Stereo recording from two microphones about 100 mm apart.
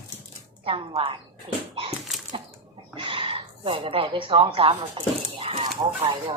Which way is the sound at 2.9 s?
60° right (ahead or behind).